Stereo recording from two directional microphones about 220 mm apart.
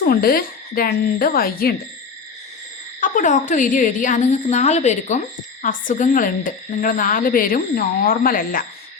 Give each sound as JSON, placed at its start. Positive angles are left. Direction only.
{"t": 0.0, "sound": "speech", "side_deg": 40}
{"t": 3.0, "sound": "speech", "side_deg": 35}